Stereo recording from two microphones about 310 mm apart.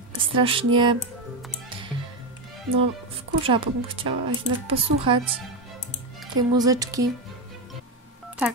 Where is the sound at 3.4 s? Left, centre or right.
Centre.